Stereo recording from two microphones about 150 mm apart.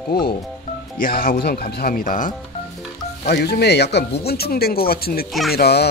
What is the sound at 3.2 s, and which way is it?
Speech, 90° left.